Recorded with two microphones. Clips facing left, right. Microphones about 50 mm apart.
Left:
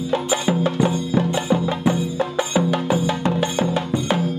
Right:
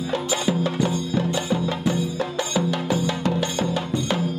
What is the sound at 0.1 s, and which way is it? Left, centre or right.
Music, left.